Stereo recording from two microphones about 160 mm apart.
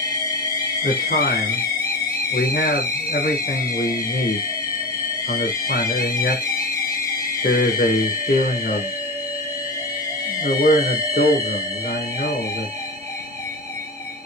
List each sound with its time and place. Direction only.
0.9 s speech: 70° left (ahead or behind)
5.4 s speech: 65° left (ahead or behind)
7.4 s speech: 65° left (ahead or behind)
10.4 s speech: 65° left (ahead or behind)